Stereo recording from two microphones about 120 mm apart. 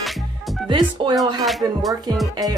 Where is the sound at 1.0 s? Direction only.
40° right (ahead or behind).